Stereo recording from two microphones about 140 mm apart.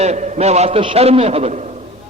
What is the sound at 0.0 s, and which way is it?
A man's voice, 55° right (ahead or behind).